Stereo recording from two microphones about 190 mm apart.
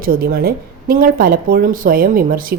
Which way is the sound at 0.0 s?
50° right (ahead or behind).